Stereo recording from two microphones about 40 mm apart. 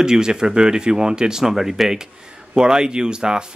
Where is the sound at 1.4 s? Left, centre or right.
Centre.